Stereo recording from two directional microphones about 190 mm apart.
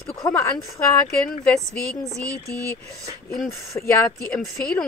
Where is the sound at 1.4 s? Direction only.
Centre (ahead or behind).